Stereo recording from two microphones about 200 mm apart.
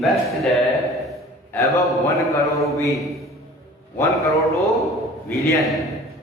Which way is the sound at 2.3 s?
15° left (ahead or behind).